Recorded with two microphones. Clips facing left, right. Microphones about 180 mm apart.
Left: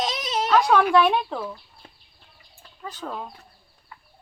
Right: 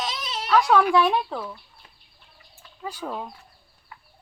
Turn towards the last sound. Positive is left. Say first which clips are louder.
# right 2 dB
turn(degrees=-10)  # may be behind; listen again after turning